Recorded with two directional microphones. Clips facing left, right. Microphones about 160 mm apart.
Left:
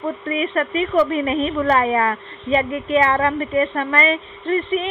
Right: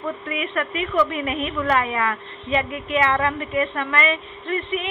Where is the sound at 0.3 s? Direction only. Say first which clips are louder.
Left 7 dB; 35° left (ahead or behind).